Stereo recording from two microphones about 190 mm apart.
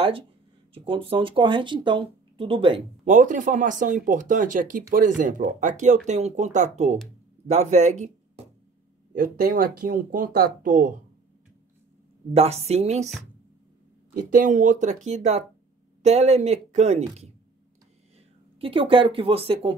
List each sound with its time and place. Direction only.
0.7 s speech: 25° right (ahead or behind)
3.1 s speech: 40° right (ahead or behind)
9.1 s speech: 50° right (ahead or behind)
12.4 s speech: 35° right (ahead or behind)
14.1 s speech: 45° right (ahead or behind)
18.6 s speech: 30° right (ahead or behind)